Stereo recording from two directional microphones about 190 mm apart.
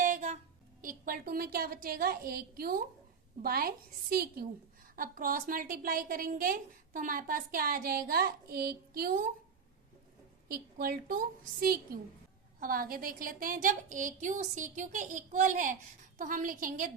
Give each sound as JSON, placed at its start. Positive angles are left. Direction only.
{"t": 0.0, "sound": "a sound", "side_deg": -40}
{"t": 0.8, "sound": "a woman's voice", "side_deg": -45}
{"t": 10.5, "sound": "a woman's voice", "side_deg": -50}